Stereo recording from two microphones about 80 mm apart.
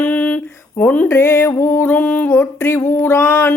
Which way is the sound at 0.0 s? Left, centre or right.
Centre.